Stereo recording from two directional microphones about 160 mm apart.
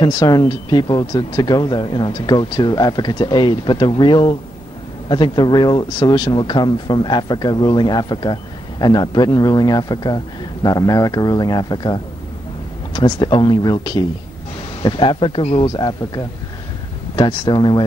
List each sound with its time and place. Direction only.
0.0 s speech: 25° left (ahead or behind)